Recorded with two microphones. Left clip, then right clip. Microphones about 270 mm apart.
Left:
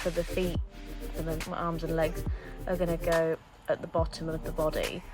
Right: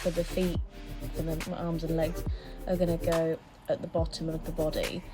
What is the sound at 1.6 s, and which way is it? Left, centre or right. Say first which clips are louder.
Speech: left 2 dB; centre.